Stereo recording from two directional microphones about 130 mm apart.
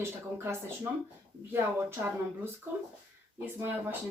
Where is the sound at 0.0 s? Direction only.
20° right (ahead or behind).